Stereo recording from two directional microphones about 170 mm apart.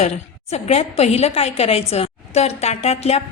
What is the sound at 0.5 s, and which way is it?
A woman's voice, 40° left (ahead or behind).